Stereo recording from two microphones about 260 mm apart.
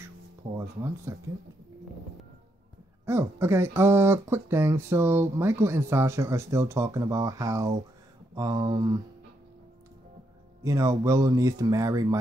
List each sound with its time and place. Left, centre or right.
0.0 s a sound: centre
3.1 s speech: centre
10.6 s speech: centre